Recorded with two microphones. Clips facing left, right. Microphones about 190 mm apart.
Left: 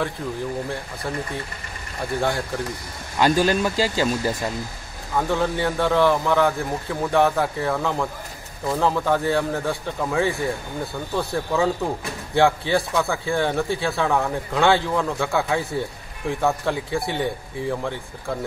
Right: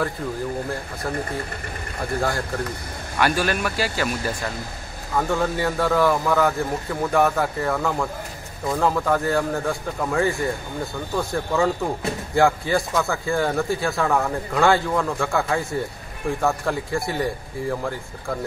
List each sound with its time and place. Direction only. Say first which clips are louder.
2.1 s a man's voice: left 1 dB; centre (ahead or behind)
3.2 s speech: left 3 dB; 20° left (ahead or behind)
5.1 s a man's voice: even; centre (ahead or behind)